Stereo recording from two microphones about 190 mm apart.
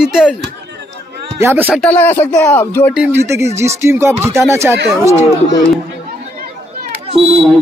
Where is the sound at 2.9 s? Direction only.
10° right (ahead or behind).